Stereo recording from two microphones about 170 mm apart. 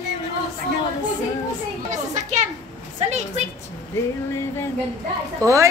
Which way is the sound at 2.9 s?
40° right (ahead or behind).